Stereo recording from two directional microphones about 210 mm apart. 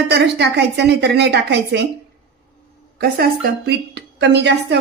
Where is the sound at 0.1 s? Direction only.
55° right (ahead or behind).